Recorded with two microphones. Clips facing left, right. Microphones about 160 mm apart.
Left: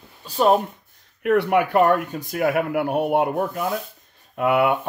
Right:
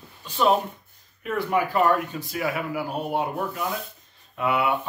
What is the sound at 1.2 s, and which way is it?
Speech, 70° left (ahead or behind).